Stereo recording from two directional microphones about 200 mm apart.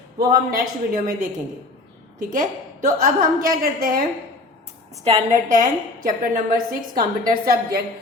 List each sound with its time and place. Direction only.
0.2 s a woman's voice: 45° right (ahead or behind)
5.0 s a woman's voice: 35° right (ahead or behind)